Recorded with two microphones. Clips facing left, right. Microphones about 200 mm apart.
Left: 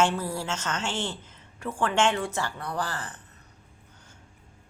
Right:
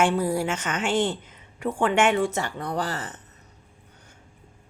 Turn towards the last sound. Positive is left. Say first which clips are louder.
# right 4 dB
turn(degrees=-25)  # may be behind; listen again after turning